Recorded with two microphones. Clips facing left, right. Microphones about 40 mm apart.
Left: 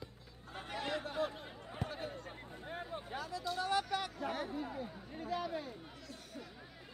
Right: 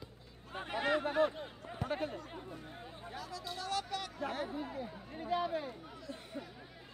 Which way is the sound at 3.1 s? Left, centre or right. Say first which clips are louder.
Left 3 dB; left.